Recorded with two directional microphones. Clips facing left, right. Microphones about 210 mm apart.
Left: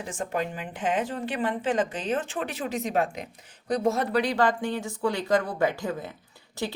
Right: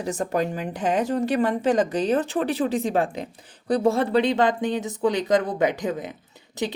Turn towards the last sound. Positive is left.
turn(degrees=-20)  # may be behind; listen again after turning